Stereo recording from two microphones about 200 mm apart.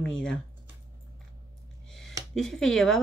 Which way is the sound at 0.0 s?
5° left (ahead or behind).